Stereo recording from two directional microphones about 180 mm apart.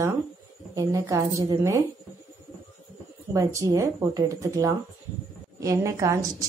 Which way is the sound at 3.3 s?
15° right (ahead or behind).